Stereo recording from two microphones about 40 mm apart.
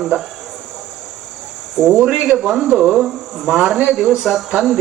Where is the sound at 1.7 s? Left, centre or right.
Centre.